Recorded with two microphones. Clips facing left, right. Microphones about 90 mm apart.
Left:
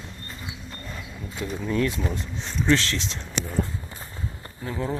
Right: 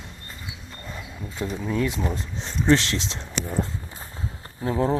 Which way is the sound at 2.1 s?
30° right (ahead or behind).